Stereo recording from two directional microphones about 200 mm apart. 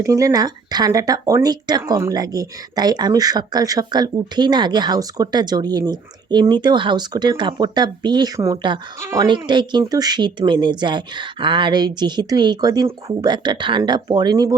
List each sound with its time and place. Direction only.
0.0 s speech: 15° right (ahead or behind)